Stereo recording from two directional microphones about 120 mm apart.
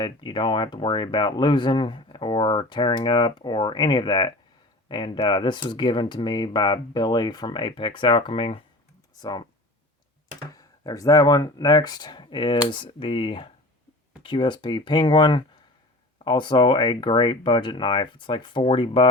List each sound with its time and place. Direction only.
0.0 s speech: 40° left (ahead or behind)
10.5 s speech: 30° left (ahead or behind); by 19.0 s 45° left (ahead or behind)